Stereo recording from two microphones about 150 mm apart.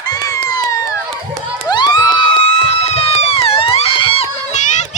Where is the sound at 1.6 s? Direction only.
30° left (ahead or behind).